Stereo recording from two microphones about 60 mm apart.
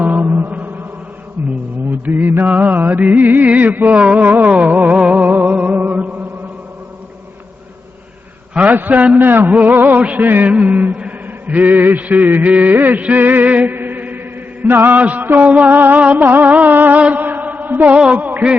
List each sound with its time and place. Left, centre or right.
0.0 s music: right
1.9 s music: right
8.5 s a man's voice: right
9.0 s a sound: right
13.7 s chant: right
14.7 s a sound: right
17.0 s mantra: right